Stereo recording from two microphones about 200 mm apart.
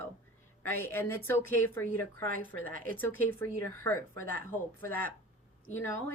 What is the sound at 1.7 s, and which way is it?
Speech, 10° left (ahead or behind).